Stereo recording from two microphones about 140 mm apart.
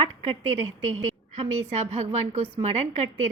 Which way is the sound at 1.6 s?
55° right (ahead or behind).